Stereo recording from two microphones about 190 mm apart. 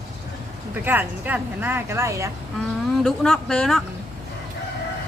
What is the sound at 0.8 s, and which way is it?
Speech, 10° right (ahead or behind).